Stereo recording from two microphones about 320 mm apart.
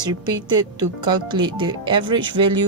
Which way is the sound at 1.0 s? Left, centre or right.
Centre.